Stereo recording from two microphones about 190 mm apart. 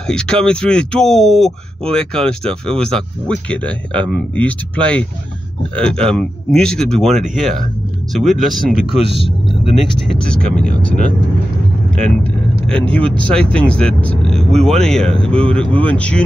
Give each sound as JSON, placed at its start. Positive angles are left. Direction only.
{"t": 0.0, "sound": "speech", "side_deg": 5}
{"t": 9.0, "sound": "speech", "side_deg": -65}
{"t": 10.1, "sound": "speech", "side_deg": 5}